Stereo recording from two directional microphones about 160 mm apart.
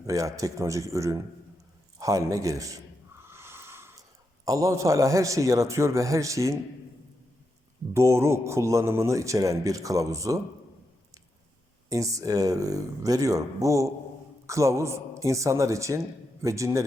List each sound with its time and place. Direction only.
0.0 s a man's voice: 20° right (ahead or behind)
3.2 s snort: 15° right (ahead or behind)
4.4 s a man's voice: 20° right (ahead or behind)
7.9 s a man's voice: 15° right (ahead or behind)
11.9 s a man's voice: 20° right (ahead or behind)